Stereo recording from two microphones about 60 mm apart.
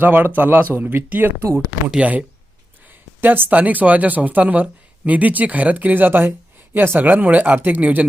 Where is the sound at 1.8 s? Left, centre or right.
Right.